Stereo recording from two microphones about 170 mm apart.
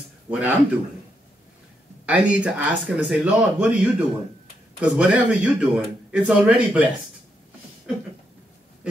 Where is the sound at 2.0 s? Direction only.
10° right (ahead or behind).